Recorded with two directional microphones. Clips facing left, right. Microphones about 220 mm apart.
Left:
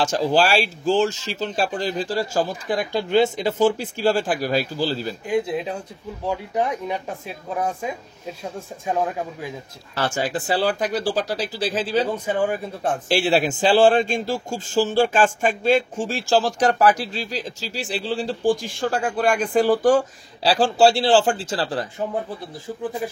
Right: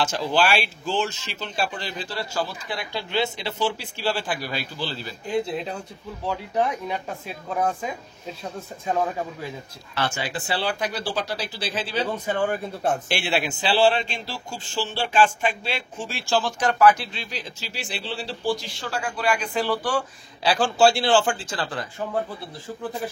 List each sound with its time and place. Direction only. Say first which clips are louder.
0.0 s a man's voice: left 4 dB; 40° left (ahead or behind)
6.2 s speech: left 1 dB; 15° left (ahead or behind)
9.9 s a man's voice: left 4 dB; 45° left (ahead or behind)
12.3 s speech: left 2 dB; 10° left (ahead or behind)
13.1 s a man's voice: left 6 dB; 40° left (ahead or behind)